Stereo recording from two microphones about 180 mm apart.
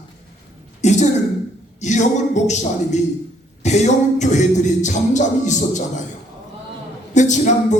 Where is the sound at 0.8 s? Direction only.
40° left (ahead or behind).